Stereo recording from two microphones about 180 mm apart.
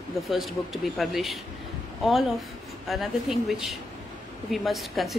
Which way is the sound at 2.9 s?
Centre (ahead or behind).